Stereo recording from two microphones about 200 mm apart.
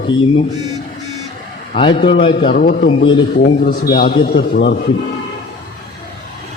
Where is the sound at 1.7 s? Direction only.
25° left (ahead or behind).